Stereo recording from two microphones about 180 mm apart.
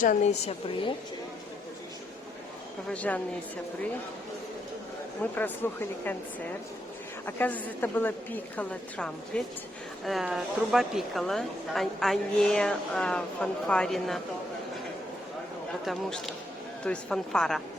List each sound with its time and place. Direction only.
0.0 s a woman's voice: 40° left (ahead or behind)
2.9 s a woman's voice: 10° left (ahead or behind)
5.2 s a woman's voice: 10° left (ahead or behind)
7.3 s a woman's voice: 10° left (ahead or behind)
15.9 s a woman's voice: centre (ahead or behind)